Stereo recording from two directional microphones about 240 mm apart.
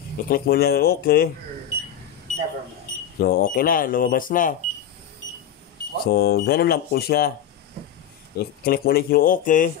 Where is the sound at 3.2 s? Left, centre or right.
Left.